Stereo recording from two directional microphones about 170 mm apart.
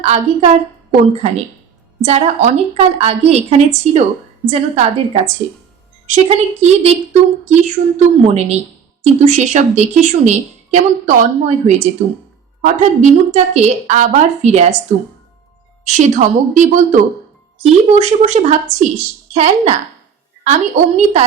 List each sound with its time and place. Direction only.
0.0 s a woman's voice: 40° right (ahead or behind)
15.9 s a woman's voice: 45° right (ahead or behind)